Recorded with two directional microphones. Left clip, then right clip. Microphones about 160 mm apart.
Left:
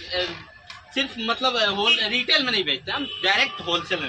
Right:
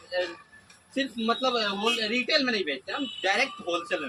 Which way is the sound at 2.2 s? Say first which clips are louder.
Left 5 dB; 15° right (ahead or behind).